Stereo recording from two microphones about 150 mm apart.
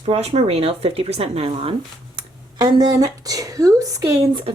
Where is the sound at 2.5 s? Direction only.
25° right (ahead or behind).